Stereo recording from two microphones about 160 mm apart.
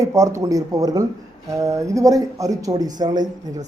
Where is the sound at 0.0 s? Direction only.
20° right (ahead or behind).